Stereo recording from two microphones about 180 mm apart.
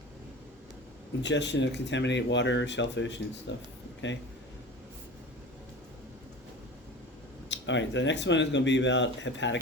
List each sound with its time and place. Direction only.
1.2 s speech: 75° left (ahead or behind)
7.5 s speech: 90° left